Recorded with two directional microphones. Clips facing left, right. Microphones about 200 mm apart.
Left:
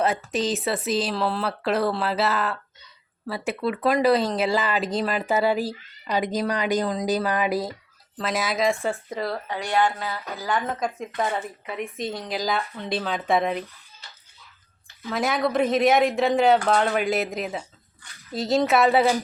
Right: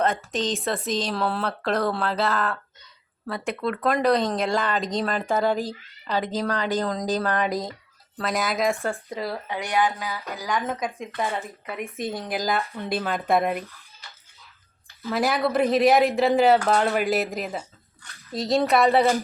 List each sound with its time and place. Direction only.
0.0 s speech: 5° left (ahead or behind)
9.5 s a sound: 15° right (ahead or behind)
10.4 s speech: centre (ahead or behind)
15.1 s speech: centre (ahead or behind)